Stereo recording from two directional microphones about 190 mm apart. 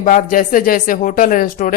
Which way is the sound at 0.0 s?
45° left (ahead or behind).